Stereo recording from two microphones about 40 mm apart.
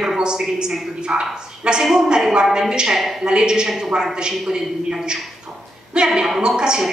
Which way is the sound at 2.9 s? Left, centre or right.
Centre.